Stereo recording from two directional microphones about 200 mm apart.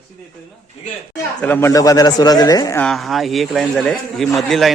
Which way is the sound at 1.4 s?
10° left (ahead or behind).